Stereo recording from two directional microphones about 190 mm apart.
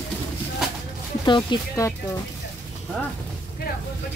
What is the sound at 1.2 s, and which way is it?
Speech, 25° left (ahead or behind).